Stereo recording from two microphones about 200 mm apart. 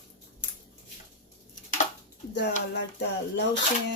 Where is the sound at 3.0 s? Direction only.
55° left (ahead or behind).